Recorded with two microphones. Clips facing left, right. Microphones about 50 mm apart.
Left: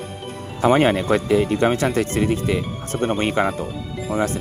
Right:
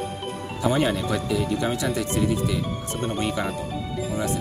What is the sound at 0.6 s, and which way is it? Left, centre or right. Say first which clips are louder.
Speech: left 7 dB; left.